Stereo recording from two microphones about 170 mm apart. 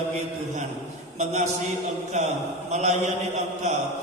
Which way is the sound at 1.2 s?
40° right (ahead or behind).